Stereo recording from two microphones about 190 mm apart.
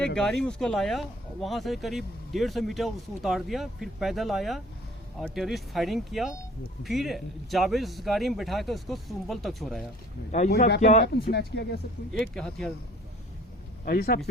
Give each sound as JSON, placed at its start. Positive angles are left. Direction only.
{"t": 0.2, "sound": "speech", "side_deg": 5}
{"t": 10.8, "sound": "speech", "side_deg": 40}
{"t": 11.0, "sound": "speech", "side_deg": 60}
{"t": 12.2, "sound": "speech", "side_deg": 5}
{"t": 13.8, "sound": "speech", "side_deg": 55}